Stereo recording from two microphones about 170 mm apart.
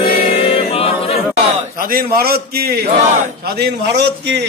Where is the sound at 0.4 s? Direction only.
35° left (ahead or behind).